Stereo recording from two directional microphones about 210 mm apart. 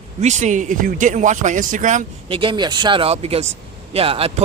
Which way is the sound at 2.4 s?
20° right (ahead or behind).